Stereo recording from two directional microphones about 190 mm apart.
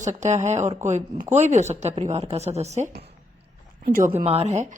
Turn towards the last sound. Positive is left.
turn(degrees=-40)  # may be behind; listen again after turning